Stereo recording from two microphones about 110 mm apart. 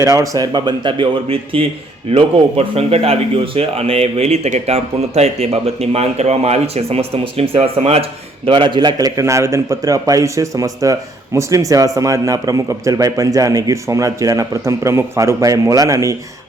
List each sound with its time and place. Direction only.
0.0 s a man's voice: 30° right (ahead or behind); by 1.6 s 50° right (ahead or behind)
2.1 s speech: 65° right (ahead or behind)
8.4 s a man's voice: 50° right (ahead or behind); by 16.1 s 30° right (ahead or behind)